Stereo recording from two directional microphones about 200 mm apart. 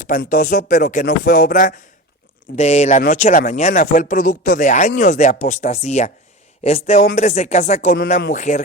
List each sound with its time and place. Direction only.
0.3 s speech: 40° left (ahead or behind)